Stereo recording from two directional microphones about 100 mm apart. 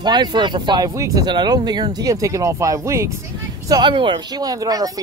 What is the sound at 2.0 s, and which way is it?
Speech, 35° right (ahead or behind).